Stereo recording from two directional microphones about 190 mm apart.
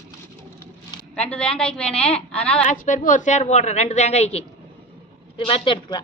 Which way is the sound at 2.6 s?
45° left (ahead or behind).